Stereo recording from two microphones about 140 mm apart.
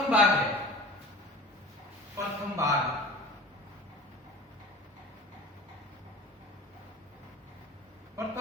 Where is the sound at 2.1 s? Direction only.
25° right (ahead or behind).